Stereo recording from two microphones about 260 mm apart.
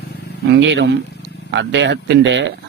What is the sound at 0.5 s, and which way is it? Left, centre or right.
A man's voice, right.